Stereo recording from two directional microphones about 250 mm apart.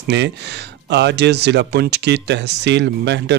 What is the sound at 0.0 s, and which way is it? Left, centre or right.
Speech, right.